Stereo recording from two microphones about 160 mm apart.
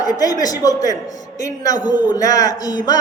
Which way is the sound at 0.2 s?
25° left (ahead or behind).